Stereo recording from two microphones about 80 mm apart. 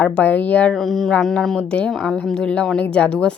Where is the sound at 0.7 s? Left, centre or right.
Centre.